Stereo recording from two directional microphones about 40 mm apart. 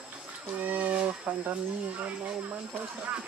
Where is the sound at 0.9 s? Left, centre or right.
Right.